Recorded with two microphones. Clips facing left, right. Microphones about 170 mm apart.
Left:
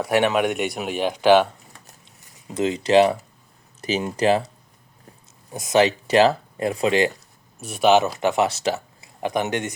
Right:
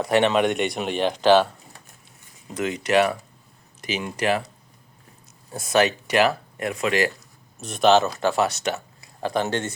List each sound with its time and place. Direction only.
0.0 s speech: 10° left (ahead or behind)
2.6 s speech: 25° left (ahead or behind)
3.8 s speech: 40° left (ahead or behind)
4.0 s speech: 25° left (ahead or behind)
5.5 s speech: 20° left (ahead or behind)
7.6 s speech: 10° left (ahead or behind)
8.2 s speech: 20° left (ahead or behind)